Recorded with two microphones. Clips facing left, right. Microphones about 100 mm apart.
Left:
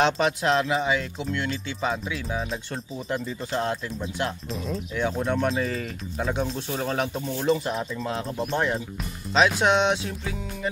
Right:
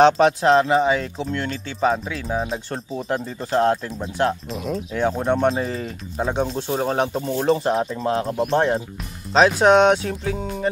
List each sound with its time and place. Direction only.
0.0 s speech: 40° right (ahead or behind)
8.1 s speech: 55° right (ahead or behind)